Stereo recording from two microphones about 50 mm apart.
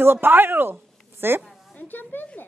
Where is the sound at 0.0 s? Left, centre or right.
Right.